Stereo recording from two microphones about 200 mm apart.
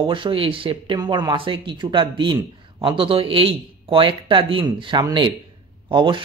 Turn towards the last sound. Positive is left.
turn(degrees=-25)  # may be behind; listen again after turning